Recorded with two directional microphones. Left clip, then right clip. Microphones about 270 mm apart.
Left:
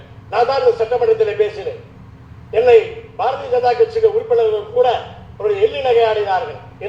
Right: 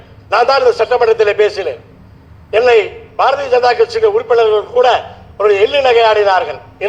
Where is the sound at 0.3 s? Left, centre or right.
Right.